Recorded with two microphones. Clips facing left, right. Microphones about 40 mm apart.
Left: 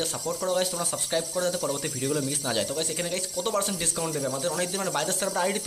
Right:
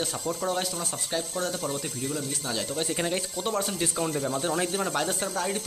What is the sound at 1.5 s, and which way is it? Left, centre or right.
Speech, right.